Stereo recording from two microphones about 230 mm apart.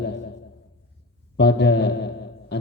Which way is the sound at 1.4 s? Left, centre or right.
Left.